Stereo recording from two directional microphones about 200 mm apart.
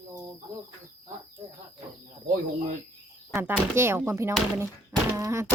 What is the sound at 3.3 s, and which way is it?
A child's voice, 10° right (ahead or behind).